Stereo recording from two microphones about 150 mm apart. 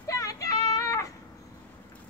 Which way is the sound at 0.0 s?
20° left (ahead or behind).